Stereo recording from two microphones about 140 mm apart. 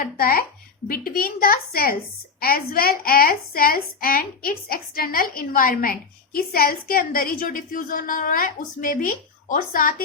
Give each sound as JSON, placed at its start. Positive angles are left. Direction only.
{"t": 0.0, "sound": "a woman's voice", "side_deg": 90}